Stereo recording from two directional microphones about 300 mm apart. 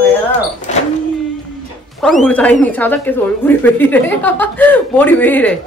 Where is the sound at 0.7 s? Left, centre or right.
Left.